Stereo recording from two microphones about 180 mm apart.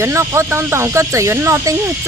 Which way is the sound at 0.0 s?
15° right (ahead or behind).